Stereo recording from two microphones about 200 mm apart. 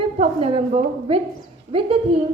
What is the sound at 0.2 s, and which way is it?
A woman's voice, 30° right (ahead or behind).